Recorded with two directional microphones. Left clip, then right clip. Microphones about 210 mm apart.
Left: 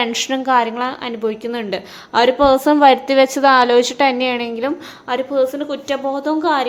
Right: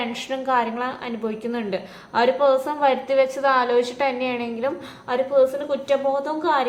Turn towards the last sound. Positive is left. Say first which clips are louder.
# left 4 dB
turn(degrees=35)  # may be behind; listen again after turning